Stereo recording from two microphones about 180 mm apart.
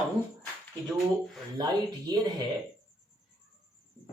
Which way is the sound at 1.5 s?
25° right (ahead or behind).